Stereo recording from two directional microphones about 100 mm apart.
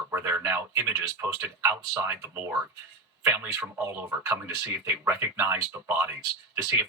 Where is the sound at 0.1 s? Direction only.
25° right (ahead or behind).